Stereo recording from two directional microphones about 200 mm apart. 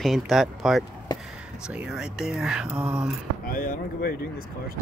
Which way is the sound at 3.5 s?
45° left (ahead or behind).